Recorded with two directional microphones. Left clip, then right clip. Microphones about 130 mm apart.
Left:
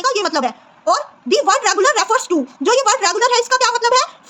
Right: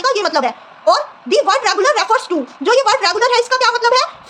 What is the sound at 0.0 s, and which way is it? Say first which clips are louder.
A woman's voice: right 2 dB; 35° left (ahead or behind).